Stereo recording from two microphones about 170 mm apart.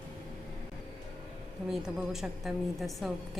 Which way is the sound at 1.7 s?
Centre (ahead or behind).